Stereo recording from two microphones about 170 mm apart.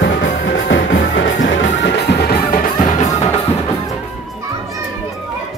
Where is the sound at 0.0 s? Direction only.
90° left; by 3.1 s 55° left (ahead or behind).